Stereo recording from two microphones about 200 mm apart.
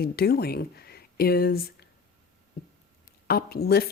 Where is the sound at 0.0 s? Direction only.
50° left (ahead or behind).